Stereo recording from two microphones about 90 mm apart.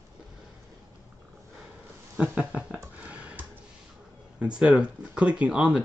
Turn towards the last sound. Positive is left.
turn(degrees=-10)  # may be behind; listen again after turning